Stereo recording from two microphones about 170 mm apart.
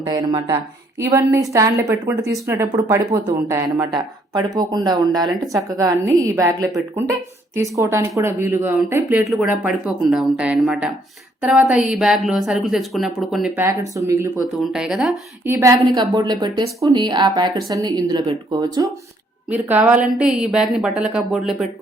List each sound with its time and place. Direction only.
0.0 s a woman's voice: 25° right (ahead or behind); by 13.5 s centre (ahead or behind)
13.6 s a woman's voice: 20° right (ahead or behind)
14.5 s a woman's voice: centre (ahead or behind)
15.4 s a woman's voice: 15° right (ahead or behind)
19.5 s a woman's voice: 10° right (ahead or behind)